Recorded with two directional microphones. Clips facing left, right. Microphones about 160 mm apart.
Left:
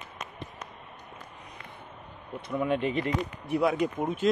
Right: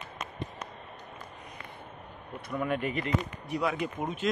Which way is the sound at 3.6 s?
45° left (ahead or behind).